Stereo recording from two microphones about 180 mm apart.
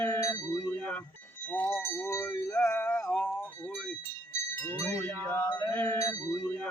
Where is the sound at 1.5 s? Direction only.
10° left (ahead or behind).